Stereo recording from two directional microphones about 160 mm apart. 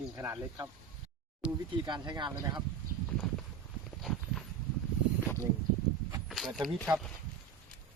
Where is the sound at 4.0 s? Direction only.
Centre (ahead or behind).